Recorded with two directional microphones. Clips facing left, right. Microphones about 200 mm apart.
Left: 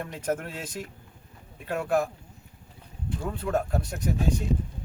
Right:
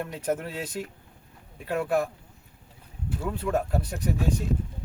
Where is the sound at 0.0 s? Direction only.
Centre (ahead or behind).